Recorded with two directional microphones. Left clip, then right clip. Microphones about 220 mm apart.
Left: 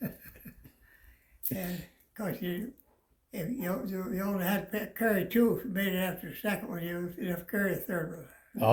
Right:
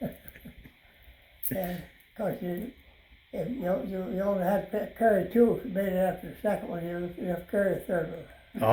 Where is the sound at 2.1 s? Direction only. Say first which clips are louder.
Right 4 dB; 30° left (ahead or behind).